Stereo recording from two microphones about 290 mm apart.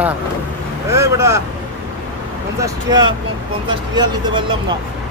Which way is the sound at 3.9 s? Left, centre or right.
Centre.